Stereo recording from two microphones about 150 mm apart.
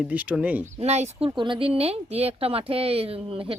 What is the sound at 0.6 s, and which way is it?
Speech, 45° right (ahead or behind).